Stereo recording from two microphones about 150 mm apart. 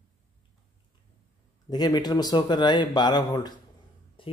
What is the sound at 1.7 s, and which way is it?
Speech, 25° left (ahead or behind).